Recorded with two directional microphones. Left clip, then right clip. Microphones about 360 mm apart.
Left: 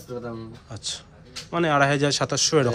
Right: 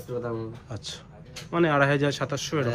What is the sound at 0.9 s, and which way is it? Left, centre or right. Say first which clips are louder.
Speech: left 11 dB; centre.